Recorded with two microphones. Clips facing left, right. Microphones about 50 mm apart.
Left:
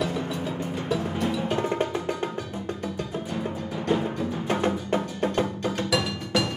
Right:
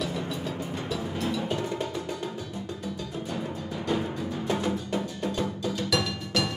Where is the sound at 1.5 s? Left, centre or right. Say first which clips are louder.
Left 4 dB; left.